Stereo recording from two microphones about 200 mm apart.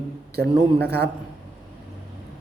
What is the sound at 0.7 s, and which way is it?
Speech, 55° right (ahead or behind).